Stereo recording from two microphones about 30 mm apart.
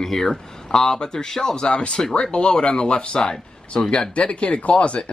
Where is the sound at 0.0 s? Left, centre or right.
Centre.